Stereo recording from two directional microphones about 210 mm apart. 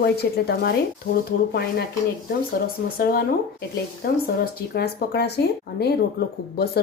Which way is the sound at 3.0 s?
45° left (ahead or behind).